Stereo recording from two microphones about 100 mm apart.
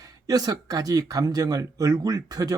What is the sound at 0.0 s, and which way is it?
Speech, 40° right (ahead or behind).